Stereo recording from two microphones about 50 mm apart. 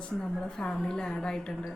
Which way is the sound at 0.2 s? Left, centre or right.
Centre.